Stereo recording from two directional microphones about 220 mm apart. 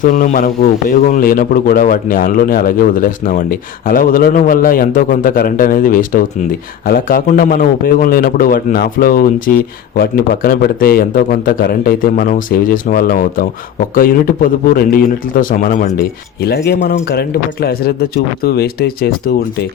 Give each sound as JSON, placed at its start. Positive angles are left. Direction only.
{"t": 0.0, "sound": "a man's voice", "side_deg": 35}